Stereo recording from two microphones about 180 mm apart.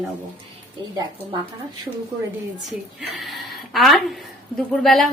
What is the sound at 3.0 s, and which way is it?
A woman's voice, centre (ahead or behind).